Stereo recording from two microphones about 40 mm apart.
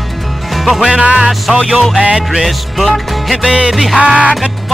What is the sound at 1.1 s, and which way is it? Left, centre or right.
Speech, centre.